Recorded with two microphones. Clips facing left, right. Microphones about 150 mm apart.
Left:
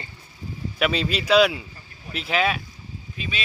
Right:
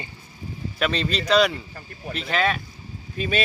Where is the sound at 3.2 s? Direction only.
45° right (ahead or behind).